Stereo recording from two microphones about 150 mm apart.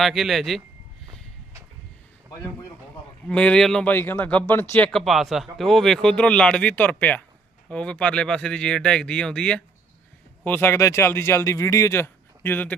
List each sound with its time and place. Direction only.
0.0 s speech: centre (ahead or behind)
3.2 s speech: 5° left (ahead or behind)